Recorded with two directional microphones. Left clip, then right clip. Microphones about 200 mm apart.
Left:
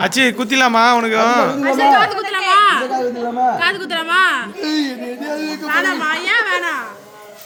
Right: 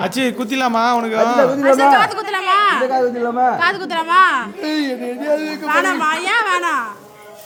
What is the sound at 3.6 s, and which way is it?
Speech, 30° right (ahead or behind).